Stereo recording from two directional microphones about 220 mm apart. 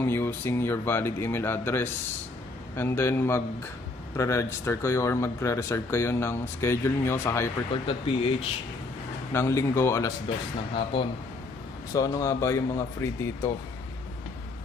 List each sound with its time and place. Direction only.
0.0 s speech: 10° left (ahead or behind)
7.8 s speech: 25° left (ahead or behind)
9.3 s speech: 10° left (ahead or behind)
10.2 s speech: 25° left (ahead or behind)